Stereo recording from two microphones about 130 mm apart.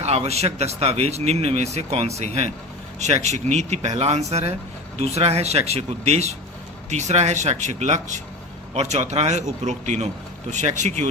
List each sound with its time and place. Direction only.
0.0 s speech: 55° right (ahead or behind)